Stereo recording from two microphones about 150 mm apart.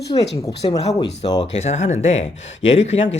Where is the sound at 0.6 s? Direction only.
45° left (ahead or behind).